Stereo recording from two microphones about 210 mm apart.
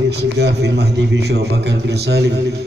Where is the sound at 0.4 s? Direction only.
55° right (ahead or behind).